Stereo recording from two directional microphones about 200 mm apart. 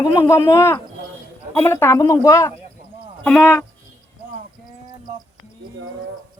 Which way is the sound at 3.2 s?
5° left (ahead or behind).